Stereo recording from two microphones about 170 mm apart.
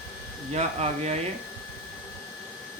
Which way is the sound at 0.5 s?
40° right (ahead or behind).